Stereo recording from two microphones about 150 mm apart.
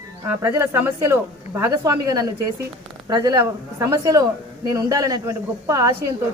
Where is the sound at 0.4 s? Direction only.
15° right (ahead or behind).